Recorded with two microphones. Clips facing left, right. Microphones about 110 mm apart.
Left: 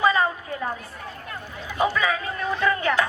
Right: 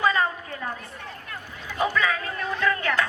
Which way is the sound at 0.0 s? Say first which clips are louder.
Left 2 dB; 15° left (ahead or behind).